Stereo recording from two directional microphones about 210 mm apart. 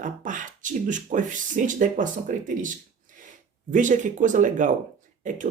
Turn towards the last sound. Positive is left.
turn(degrees=-35)  # may be behind; listen again after turning